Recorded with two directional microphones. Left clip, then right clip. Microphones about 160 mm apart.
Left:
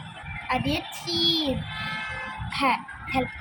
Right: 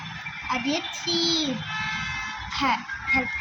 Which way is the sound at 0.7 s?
45° left (ahead or behind).